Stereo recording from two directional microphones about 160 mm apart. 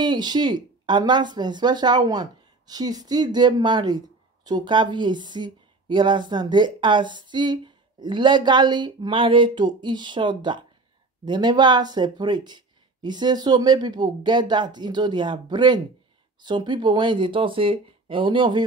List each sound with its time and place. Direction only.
0.0 s speech: 25° right (ahead or behind)